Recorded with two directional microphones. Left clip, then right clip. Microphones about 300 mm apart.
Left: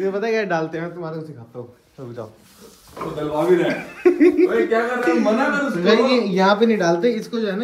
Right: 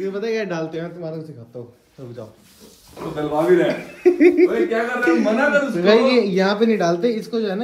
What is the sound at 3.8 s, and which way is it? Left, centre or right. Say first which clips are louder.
Speech: even; centre.